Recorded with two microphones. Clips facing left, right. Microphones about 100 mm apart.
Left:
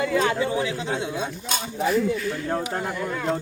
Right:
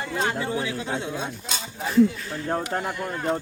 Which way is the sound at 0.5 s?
20° left (ahead or behind).